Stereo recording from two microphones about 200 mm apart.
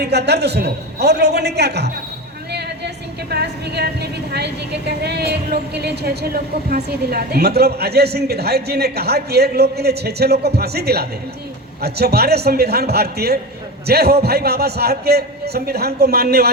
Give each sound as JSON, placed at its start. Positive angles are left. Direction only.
{"t": 0.0, "sound": "a man's voice", "side_deg": -55}